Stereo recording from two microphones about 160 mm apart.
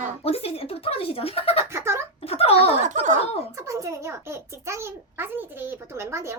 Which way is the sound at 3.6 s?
20° right (ahead or behind).